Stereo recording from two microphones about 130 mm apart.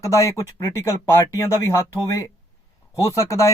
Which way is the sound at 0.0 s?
25° left (ahead or behind).